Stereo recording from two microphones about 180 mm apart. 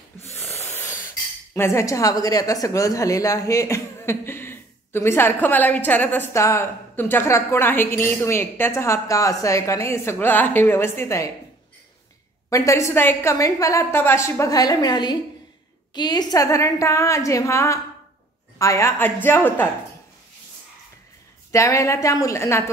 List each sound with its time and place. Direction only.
0.3 s a sound: 10° left (ahead or behind)
1.5 s a woman's voice: 15° left (ahead or behind)
12.4 s a woman's voice: 15° left (ahead or behind)
21.5 s a woman's voice: 15° left (ahead or behind)